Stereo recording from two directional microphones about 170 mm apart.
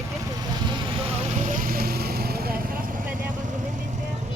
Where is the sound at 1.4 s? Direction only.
55° right (ahead or behind).